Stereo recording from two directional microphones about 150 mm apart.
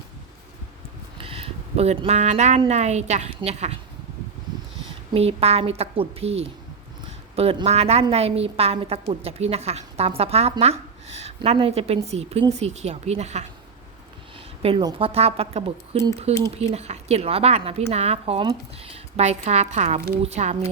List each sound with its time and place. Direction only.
1.2 s a sound: 40° right (ahead or behind)
2.6 s a woman's voice: 50° right (ahead or behind)
4.9 s a woman's voice: 40° right (ahead or behind)
14.6 s a woman's voice: 40° right (ahead or behind)